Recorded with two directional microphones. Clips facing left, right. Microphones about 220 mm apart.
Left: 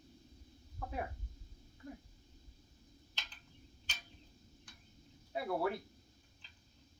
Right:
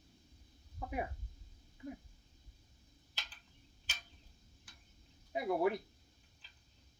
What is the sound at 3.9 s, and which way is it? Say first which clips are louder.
Tick-tock: even; 5° right (ahead or behind).